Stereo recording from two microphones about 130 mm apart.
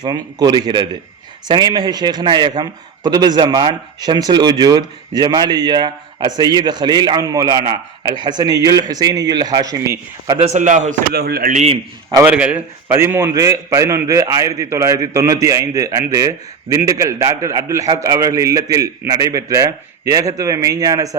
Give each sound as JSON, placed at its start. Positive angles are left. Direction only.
{"t": 0.0, "sound": "a man's voice", "side_deg": -30}
{"t": 10.3, "sound": "a man's voice", "side_deg": -55}
{"t": 12.2, "sound": "a man's voice", "side_deg": -10}